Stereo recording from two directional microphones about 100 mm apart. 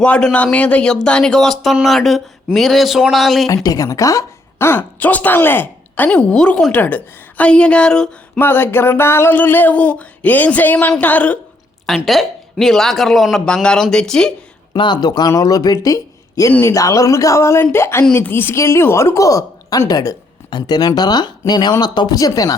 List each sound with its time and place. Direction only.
0.0 s a woman's voice: 10° left (ahead or behind)
3.5 s speech: 35° left (ahead or behind); by 6.1 s 20° left (ahead or behind)
6.1 s a woman's voice: 10° left (ahead or behind)
8.4 s a woman's voice: 20° left (ahead or behind)
11.9 s speech: centre (ahead or behind)
14.7 s speech: 45° left (ahead or behind)
16.5 s speech: 20° left (ahead or behind)
16.7 s a woman's voice: 35° left (ahead or behind)